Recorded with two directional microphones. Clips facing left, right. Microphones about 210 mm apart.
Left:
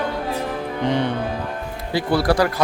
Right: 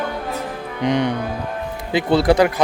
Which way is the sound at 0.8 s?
15° right (ahead or behind).